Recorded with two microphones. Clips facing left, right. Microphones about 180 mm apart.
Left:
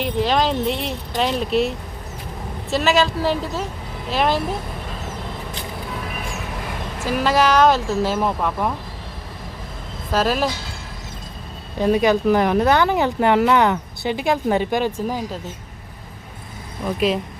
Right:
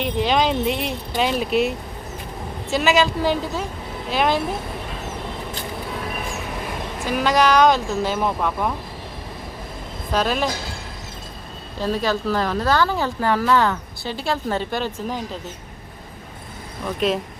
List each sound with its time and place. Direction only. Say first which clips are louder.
0.0 s speech: even; centre (ahead or behind)
7.0 s speech: left 1 dB; centre (ahead or behind)
10.1 s speech: left 2 dB; 5° left (ahead or behind)
11.8 s speech: left 6 dB; 15° left (ahead or behind)
16.8 s speech: left 2 dB; 5° left (ahead or behind)